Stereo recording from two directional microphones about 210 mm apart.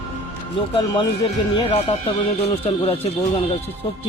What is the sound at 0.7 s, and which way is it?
Speech, 25° left (ahead or behind).